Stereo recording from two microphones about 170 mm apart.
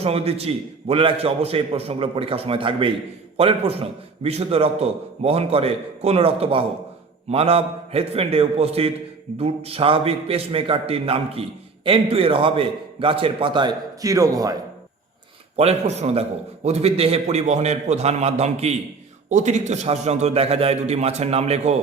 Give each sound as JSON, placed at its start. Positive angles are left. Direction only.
{"t": 0.0, "sound": "a man's voice", "side_deg": -35}
{"t": 15.5, "sound": "a man's voice", "side_deg": -40}